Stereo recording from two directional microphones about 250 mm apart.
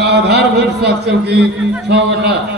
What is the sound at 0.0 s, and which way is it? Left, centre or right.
A man's voice, right.